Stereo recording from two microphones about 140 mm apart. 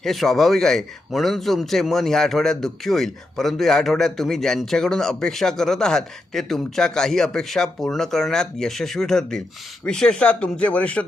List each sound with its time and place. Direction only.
0.0 s a man's voice: centre (ahead or behind)